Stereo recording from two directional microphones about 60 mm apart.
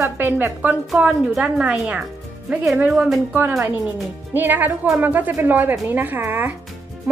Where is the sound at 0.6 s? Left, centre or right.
Centre.